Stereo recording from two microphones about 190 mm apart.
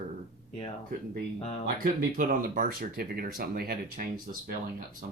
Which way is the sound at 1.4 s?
30° left (ahead or behind).